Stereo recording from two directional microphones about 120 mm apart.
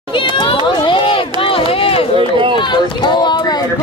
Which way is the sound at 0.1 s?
45° left (ahead or behind).